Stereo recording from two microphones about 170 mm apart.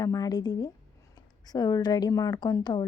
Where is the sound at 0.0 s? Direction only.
20° left (ahead or behind).